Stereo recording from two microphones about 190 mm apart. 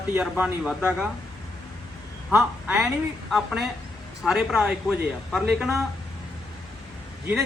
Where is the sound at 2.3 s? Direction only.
5° right (ahead or behind).